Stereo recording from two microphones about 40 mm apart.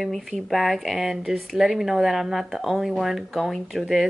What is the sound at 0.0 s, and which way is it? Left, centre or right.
Speech, centre.